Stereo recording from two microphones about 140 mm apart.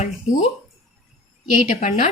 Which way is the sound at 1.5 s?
70° left (ahead or behind).